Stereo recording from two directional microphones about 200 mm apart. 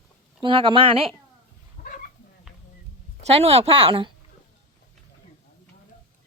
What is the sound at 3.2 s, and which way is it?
Speech, 30° right (ahead or behind).